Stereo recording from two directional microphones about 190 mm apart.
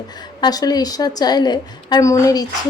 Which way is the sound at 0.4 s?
20° left (ahead or behind).